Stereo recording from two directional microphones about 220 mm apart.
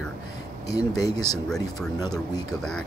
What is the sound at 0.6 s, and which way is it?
Speech, 15° left (ahead or behind).